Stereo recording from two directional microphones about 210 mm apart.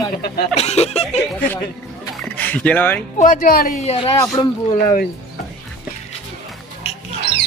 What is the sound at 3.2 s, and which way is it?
Speech, 40° left (ahead or behind).